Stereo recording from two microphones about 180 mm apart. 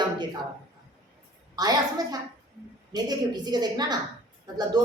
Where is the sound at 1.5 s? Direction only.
20° right (ahead or behind).